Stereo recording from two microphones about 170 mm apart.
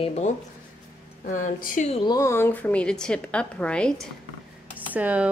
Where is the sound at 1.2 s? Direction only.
50° left (ahead or behind).